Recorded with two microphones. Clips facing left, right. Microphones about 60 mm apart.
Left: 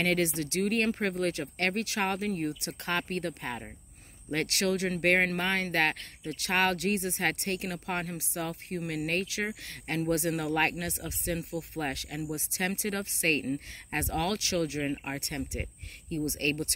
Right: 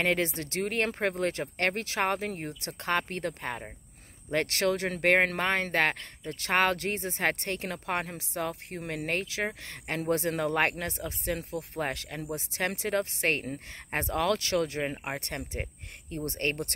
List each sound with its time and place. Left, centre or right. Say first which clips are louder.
0.0 s speech: even; right